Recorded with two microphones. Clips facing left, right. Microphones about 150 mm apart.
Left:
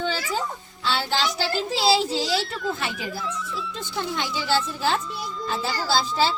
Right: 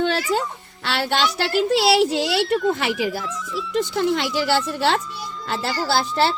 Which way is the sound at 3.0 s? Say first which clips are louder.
Right 8 dB; 90° right.